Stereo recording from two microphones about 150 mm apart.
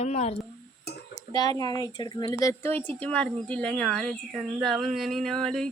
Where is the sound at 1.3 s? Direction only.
25° left (ahead or behind); by 5.7 s 5° left (ahead or behind).